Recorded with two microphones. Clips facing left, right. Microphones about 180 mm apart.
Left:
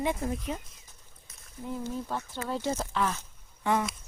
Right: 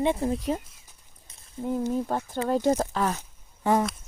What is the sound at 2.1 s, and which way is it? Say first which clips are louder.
Speech: right 7 dB; 50° right (ahead or behind).